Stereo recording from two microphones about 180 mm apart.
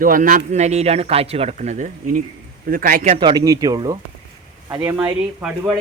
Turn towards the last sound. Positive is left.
turn(degrees=-10)  # may be behind; listen again after turning